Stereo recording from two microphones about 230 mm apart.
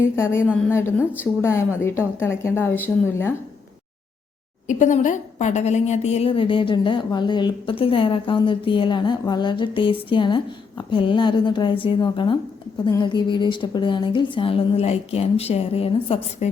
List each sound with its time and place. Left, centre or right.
0.0 s a woman's voice: centre
4.6 s a woman's voice: left